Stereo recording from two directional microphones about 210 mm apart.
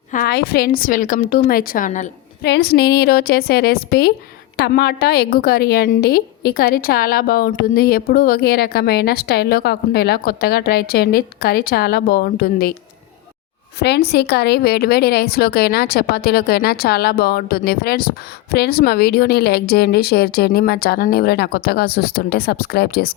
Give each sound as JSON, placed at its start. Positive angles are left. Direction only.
{"t": 0.1, "sound": "a woman's voice", "side_deg": 45}
{"t": 2.4, "sound": "a woman's voice", "side_deg": 50}
{"t": 13.7, "sound": "a woman's voice", "side_deg": 50}